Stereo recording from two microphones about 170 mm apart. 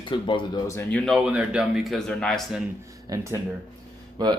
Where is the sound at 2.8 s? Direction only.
20° right (ahead or behind).